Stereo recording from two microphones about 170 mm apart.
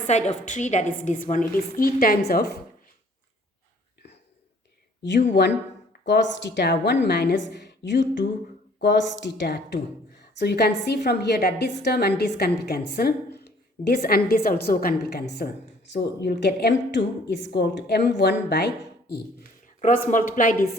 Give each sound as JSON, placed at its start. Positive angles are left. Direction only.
{"t": 0.1, "sound": "a woman's voice", "side_deg": 45}
{"t": 5.0, "sound": "speech", "side_deg": 90}
{"t": 10.2, "sound": "a woman's voice", "side_deg": 70}
{"t": 19.6, "sound": "speech", "side_deg": 50}